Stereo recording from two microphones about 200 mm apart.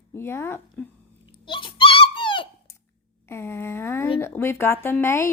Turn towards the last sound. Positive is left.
turn(degrees=10)  # may be behind; listen again after turning